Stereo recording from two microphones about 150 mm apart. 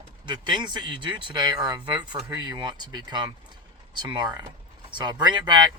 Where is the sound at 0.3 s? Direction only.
30° right (ahead or behind).